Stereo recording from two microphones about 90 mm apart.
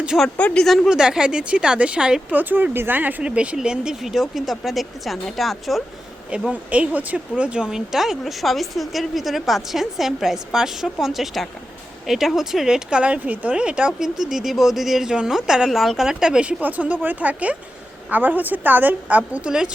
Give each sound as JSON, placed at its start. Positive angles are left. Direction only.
{"t": 0.3, "sound": "speech", "side_deg": 10}
{"t": 0.9, "sound": "speech", "side_deg": -10}
{"t": 2.4, "sound": "speech", "side_deg": -20}
{"t": 6.3, "sound": "a woman's voice", "side_deg": -10}